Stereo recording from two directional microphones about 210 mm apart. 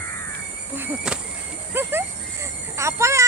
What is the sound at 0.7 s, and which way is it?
Speech, 10° right (ahead or behind).